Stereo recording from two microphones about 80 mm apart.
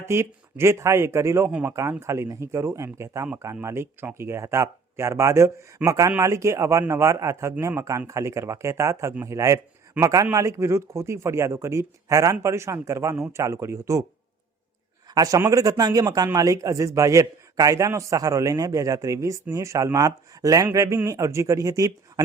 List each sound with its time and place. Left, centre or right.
0.0 s a man's voice: right
15.1 s a man's voice: right